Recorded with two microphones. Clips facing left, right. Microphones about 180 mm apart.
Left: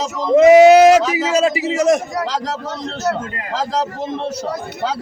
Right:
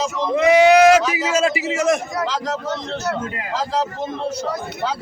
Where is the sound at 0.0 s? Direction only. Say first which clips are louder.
Left 7 dB; 40° left (ahead or behind).